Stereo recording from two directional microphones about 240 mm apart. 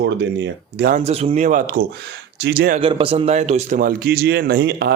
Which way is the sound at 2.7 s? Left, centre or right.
Right.